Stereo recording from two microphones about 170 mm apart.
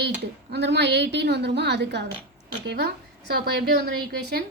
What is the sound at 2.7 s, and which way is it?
Speech, 75° right (ahead or behind).